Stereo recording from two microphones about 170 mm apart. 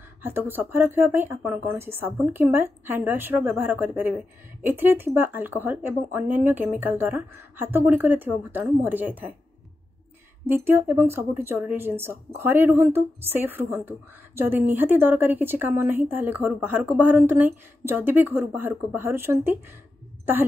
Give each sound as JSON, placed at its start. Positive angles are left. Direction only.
{"t": 0.2, "sound": "speech", "side_deg": -15}
{"t": 10.4, "sound": "speech", "side_deg": -15}